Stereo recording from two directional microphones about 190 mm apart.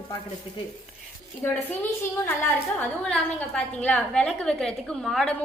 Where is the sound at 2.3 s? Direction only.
5° left (ahead or behind).